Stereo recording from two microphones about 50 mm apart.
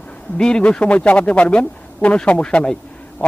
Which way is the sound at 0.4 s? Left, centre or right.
Centre.